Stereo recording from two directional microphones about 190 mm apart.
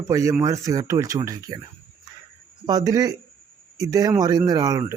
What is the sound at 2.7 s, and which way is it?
Speech, 20° right (ahead or behind).